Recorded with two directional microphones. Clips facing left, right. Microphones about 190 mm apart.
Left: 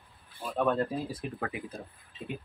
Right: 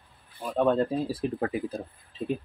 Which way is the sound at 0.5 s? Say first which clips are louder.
Right 5 dB; 20° right (ahead or behind).